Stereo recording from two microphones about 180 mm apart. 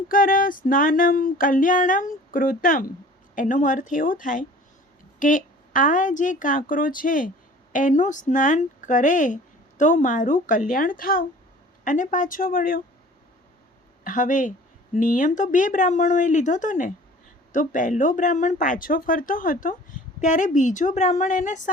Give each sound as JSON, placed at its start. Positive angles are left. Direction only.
{"t": 0.1, "sound": "speech", "side_deg": 50}
{"t": 14.0, "sound": "speech", "side_deg": 45}